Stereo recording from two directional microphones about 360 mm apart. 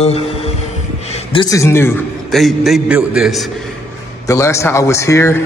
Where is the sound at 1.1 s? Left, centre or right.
Centre.